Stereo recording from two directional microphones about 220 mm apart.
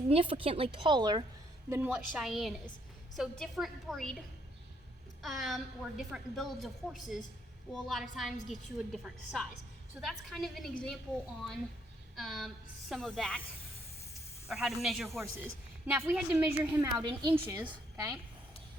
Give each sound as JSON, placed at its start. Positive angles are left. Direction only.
{"t": 0.1, "sound": "a woman's voice", "side_deg": -25}
{"t": 1.7, "sound": "a woman's voice", "side_deg": -5}
{"t": 5.2, "sound": "a woman's voice", "side_deg": 0}
{"t": 12.1, "sound": "a woman's voice", "side_deg": 0}
{"t": 14.4, "sound": "a woman's voice", "side_deg": 0}